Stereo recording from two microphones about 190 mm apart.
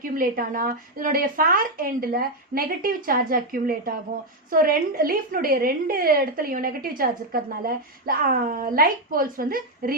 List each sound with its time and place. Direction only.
0.0 s a woman's voice: 45° right (ahead or behind)